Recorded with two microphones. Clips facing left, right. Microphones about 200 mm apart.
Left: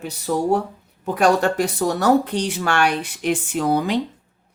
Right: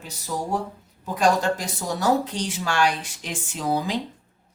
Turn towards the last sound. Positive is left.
turn(degrees=65)  # may be behind; listen again after turning